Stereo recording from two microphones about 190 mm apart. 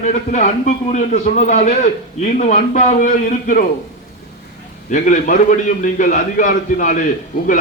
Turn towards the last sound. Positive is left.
turn(degrees=50)  # may be behind; listen again after turning